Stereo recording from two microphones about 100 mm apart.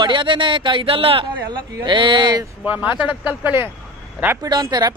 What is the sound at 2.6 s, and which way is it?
Speech, 15° right (ahead or behind).